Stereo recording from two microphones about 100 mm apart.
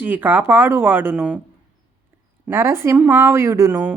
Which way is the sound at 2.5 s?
25° right (ahead or behind).